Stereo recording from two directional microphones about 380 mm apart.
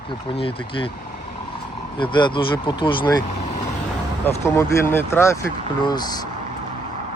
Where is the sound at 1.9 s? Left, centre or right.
Centre.